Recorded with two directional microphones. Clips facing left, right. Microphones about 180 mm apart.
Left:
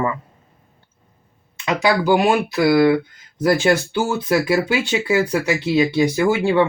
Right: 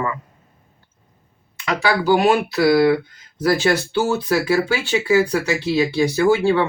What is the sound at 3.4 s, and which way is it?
Speech, 20° left (ahead or behind).